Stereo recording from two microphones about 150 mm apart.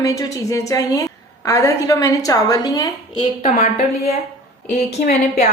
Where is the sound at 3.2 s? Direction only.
45° left (ahead or behind).